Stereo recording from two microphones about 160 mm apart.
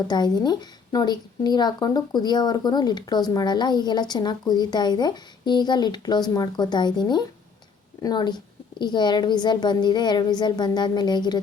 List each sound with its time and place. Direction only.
0.1 s speech: 25° left (ahead or behind)